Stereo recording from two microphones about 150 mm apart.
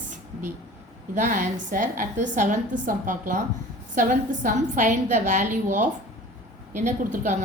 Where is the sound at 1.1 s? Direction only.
55° right (ahead or behind).